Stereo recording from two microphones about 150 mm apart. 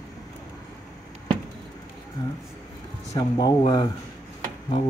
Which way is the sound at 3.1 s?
30° left (ahead or behind).